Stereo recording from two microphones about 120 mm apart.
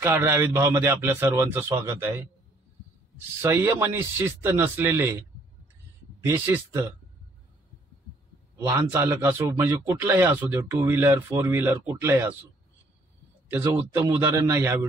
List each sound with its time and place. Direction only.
0.0 s speech: 20° right (ahead or behind)
3.4 s speech: 20° right (ahead or behind)
6.2 s speech: 20° right (ahead or behind)
8.6 s speech: 20° right (ahead or behind)
13.5 s speech: 20° right (ahead or behind)